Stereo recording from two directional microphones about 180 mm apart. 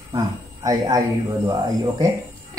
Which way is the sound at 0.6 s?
20° right (ahead or behind).